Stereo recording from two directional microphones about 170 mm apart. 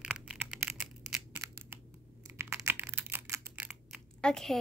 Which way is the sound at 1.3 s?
15° right (ahead or behind).